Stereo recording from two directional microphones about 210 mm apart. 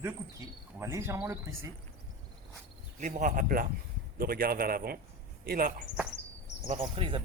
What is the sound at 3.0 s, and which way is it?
A man's voice, 35° right (ahead or behind).